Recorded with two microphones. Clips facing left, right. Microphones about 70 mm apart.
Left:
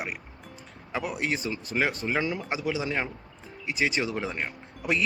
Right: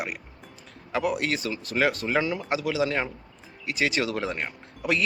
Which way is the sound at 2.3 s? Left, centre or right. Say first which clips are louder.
Right 2 dB; centre.